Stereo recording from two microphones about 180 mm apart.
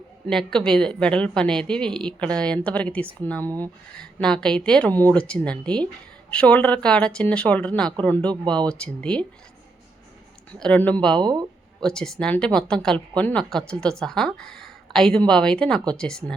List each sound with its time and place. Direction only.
0.3 s a woman's voice: 5° left (ahead or behind)
10.6 s speech: 5° left (ahead or behind)
11.2 s speech: 25° right (ahead or behind)
11.8 s a woman's voice: 5° left (ahead or behind)